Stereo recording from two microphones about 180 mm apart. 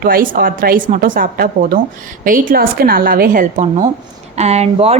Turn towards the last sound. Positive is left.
turn(degrees=-35)  # may be behind; listen again after turning